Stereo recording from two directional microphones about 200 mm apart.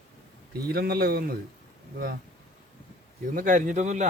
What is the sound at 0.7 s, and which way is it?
Speech, 50° right (ahead or behind).